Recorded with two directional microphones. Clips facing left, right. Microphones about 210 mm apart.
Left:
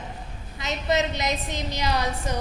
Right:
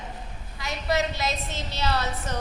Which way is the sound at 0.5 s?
20° left (ahead or behind).